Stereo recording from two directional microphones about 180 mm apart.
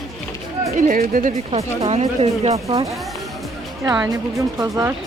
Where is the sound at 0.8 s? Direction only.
45° right (ahead or behind).